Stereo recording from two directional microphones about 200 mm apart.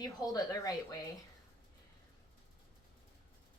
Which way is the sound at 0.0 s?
20° left (ahead or behind).